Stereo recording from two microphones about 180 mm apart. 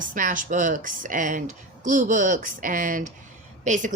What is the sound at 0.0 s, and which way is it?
Speech, 45° right (ahead or behind).